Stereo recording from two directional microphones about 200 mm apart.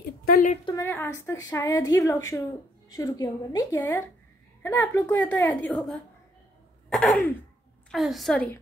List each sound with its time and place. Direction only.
0.3 s speech: 40° left (ahead or behind)
0.7 s a woman's voice: 10° left (ahead or behind)